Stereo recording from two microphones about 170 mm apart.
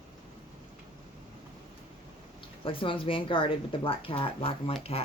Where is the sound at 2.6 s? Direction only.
30° left (ahead or behind).